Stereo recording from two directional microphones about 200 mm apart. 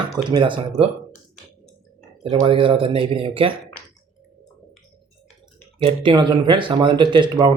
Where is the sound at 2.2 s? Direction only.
25° right (ahead or behind).